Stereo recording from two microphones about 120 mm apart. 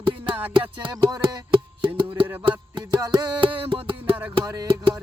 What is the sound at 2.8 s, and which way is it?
Music, 40° right (ahead or behind).